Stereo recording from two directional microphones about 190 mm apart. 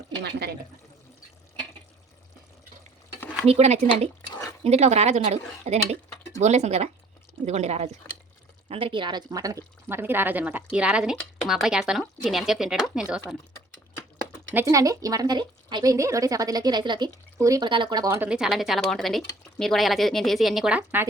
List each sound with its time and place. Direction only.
0.2 s speech: 55° right (ahead or behind)
3.4 s speech: 35° right (ahead or behind); by 13.2 s 5° right (ahead or behind)
14.5 s a woman's voice: 15° right (ahead or behind)